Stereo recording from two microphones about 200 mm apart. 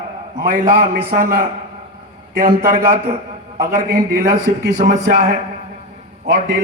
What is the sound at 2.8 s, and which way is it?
Speech, 30° right (ahead or behind).